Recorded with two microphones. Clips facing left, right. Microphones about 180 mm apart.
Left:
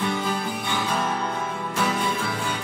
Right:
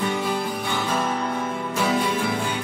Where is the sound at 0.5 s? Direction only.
Centre (ahead or behind).